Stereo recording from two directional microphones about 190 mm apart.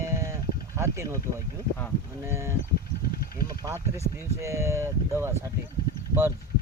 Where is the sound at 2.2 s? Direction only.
15° right (ahead or behind).